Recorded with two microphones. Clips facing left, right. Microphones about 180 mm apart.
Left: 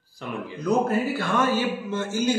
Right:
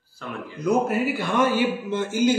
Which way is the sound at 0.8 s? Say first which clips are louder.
Even; 15° right (ahead or behind).